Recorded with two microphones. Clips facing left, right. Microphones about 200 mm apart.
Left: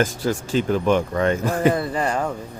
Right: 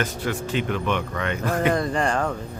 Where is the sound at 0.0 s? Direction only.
40° left (ahead or behind).